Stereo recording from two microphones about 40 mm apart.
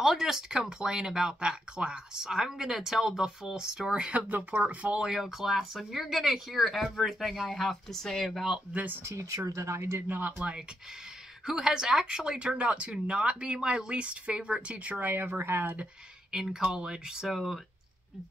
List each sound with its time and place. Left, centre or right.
0.0 s speech: centre
4.3 s speech: right
4.6 s speech: right
5.1 s speech: centre
10.0 s speech: right
11.4 s speech: centre
12.5 s speech: right
15.0 s speech: right
15.6 s speech: right
16.3 s speech: centre
17.3 s speech: centre